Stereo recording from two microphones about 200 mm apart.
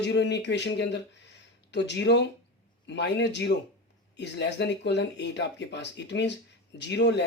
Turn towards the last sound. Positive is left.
turn(degrees=60)  # may be behind; listen again after turning